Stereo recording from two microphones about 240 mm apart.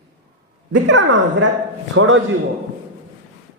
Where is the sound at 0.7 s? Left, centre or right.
Right.